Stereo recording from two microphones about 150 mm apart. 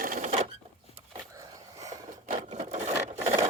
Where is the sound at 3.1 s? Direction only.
45° right (ahead or behind).